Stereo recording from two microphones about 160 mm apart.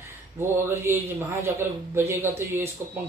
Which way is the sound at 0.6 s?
15° right (ahead or behind).